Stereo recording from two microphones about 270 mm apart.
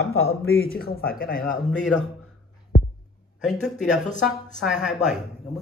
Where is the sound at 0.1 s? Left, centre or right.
Left.